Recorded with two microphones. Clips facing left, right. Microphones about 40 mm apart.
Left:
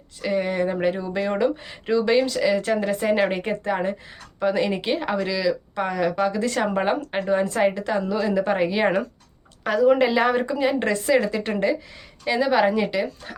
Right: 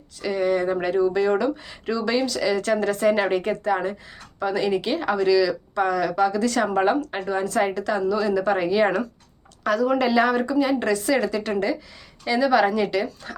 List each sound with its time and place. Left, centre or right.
0.2 s a woman's voice: left
2.4 s a woman's voice: centre